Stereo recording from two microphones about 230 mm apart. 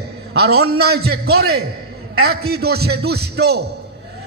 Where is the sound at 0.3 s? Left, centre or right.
Right.